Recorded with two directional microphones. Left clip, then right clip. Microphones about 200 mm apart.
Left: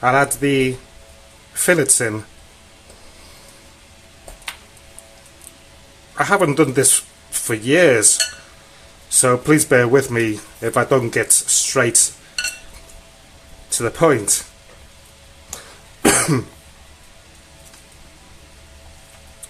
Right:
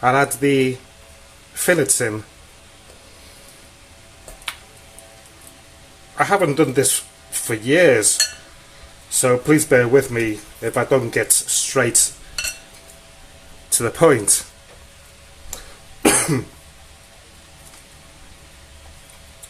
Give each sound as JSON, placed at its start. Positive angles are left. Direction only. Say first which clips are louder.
{"t": 0.0, "sound": "speech", "louder": "left 1 dB", "side_deg": 5}
{"t": 6.1, "sound": "speech", "louder": "left 1 dB", "side_deg": 15}
{"t": 13.7, "sound": "speech", "louder": "right 1 dB", "side_deg": 0}
{"t": 16.0, "sound": "cough", "louder": "left 1 dB", "side_deg": 25}